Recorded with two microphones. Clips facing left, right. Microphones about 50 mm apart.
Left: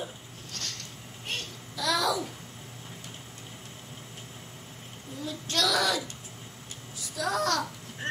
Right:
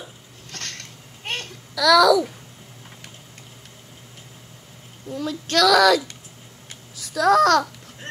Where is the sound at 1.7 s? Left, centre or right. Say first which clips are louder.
Right 13 dB; right.